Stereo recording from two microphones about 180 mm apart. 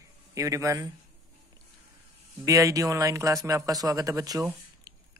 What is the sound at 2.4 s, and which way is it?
Speech, 20° right (ahead or behind).